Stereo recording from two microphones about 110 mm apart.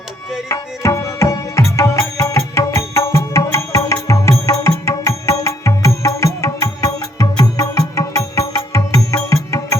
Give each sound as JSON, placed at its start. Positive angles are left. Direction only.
{"t": 0.4, "sound": "tabla", "side_deg": 25}